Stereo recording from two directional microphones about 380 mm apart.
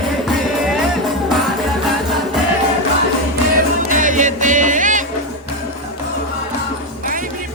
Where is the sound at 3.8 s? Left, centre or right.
Centre.